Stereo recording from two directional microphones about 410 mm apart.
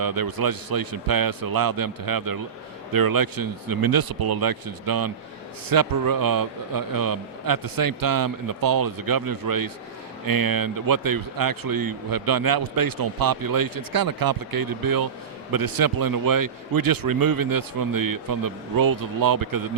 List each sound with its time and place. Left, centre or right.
0.0 s a man's voice: right